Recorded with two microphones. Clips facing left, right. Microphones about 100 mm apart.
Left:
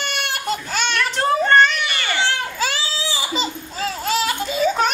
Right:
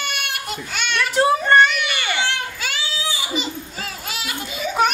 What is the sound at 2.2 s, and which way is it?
Crying, 30° left (ahead or behind).